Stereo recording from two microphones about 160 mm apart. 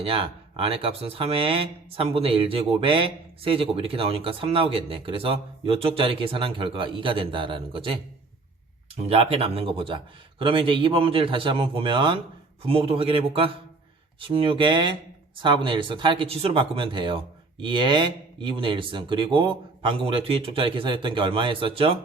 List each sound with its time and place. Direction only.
0.0 s speech: 35° right (ahead or behind)
9.0 s speech: 35° right (ahead or behind)